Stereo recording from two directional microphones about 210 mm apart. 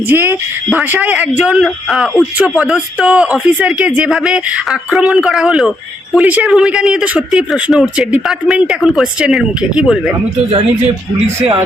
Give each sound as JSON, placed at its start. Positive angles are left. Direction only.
{"t": 0.1, "sound": "speech", "side_deg": -10}
{"t": 11.3, "sound": "speech", "side_deg": -20}